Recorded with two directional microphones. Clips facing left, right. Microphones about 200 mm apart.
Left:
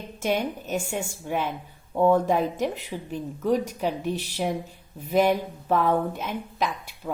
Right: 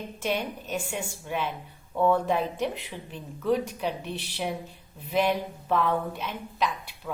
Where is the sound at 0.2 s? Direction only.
45° left (ahead or behind).